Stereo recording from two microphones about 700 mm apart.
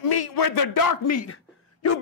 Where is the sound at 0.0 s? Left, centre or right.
Left.